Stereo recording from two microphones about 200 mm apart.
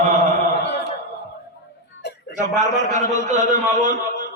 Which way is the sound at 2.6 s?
35° right (ahead or behind).